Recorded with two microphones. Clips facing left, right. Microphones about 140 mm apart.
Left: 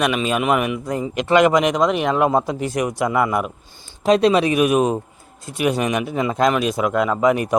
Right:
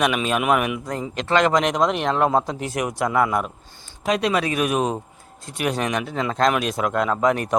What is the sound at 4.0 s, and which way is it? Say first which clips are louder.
Speech: left 6 dB; 30° left (ahead or behind).